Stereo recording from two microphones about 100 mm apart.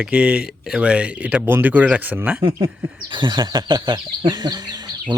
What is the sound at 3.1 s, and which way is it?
Speech, 50° right (ahead or behind).